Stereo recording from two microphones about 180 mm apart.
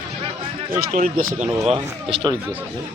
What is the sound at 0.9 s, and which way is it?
Speech, 50° right (ahead or behind).